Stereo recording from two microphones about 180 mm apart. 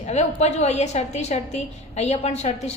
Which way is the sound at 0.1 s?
40° left (ahead or behind).